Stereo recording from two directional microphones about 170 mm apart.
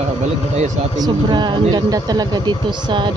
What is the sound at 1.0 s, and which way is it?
Speech, 25° right (ahead or behind).